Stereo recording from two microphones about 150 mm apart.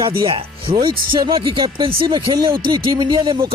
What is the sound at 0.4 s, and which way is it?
Speech, 35° right (ahead or behind).